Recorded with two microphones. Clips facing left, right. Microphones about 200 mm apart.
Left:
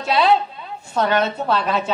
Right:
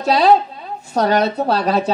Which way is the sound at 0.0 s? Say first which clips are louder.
Right 4 dB; 40° right (ahead or behind).